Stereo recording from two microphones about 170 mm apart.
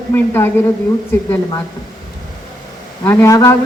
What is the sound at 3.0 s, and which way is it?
Speech, 15° left (ahead or behind).